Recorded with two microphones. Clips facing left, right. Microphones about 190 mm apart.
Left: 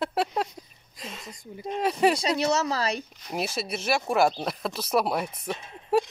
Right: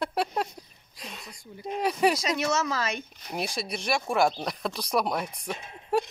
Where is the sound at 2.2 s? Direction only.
35° left (ahead or behind).